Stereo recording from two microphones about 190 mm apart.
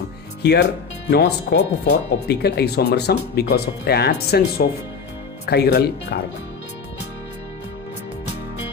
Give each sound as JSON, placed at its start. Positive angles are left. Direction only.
{"t": 0.4, "sound": "speech", "side_deg": 65}